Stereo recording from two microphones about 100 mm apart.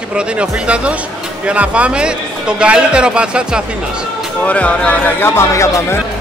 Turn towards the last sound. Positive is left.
turn(degrees=30)  # may be behind; listen again after turning